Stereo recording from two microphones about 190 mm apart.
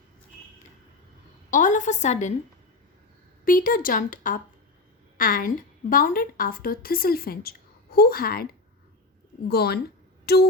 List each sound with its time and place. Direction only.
1.5 s a woman's voice: 40° left (ahead or behind)
3.4 s a woman's voice: 45° left (ahead or behind)
9.5 s speech: 55° left (ahead or behind)
10.3 s music: 55° left (ahead or behind)